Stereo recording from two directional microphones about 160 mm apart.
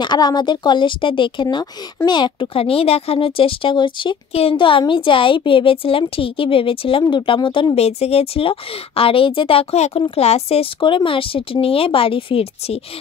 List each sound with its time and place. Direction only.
0.0 s speech: 25° left (ahead or behind)